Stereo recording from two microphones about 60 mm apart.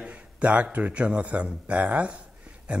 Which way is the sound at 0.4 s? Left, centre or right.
Right.